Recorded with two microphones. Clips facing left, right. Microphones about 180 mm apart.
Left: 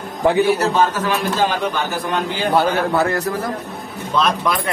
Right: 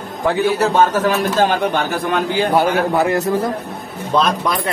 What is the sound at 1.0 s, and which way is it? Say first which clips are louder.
Speech: right 3 dB; 50° right (ahead or behind).